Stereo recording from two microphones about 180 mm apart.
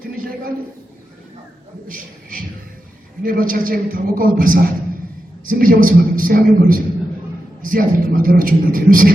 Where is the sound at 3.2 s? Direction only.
50° right (ahead or behind).